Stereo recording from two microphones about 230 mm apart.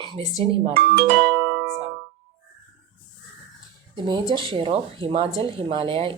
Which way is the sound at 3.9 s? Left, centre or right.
Right.